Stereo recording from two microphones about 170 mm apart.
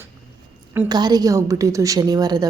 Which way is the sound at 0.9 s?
25° right (ahead or behind).